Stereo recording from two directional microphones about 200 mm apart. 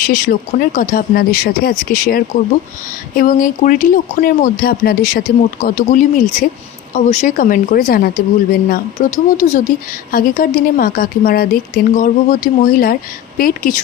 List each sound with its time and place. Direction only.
0.6 s speech: 45° left (ahead or behind)